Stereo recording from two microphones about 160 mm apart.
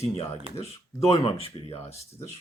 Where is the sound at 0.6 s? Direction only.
40° left (ahead or behind).